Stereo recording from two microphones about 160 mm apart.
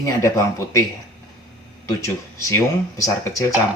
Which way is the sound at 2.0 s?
20° left (ahead or behind).